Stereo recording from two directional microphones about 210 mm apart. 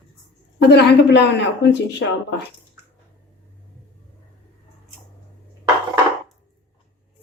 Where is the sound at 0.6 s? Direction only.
55° left (ahead or behind).